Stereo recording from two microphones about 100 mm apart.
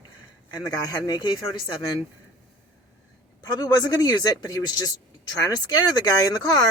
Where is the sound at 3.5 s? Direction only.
45° left (ahead or behind).